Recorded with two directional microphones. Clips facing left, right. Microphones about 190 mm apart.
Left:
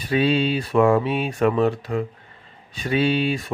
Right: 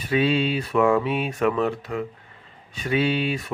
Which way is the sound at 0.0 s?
30° left (ahead or behind).